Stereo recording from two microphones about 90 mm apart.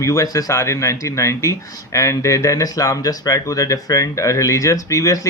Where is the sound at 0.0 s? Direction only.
35° left (ahead or behind).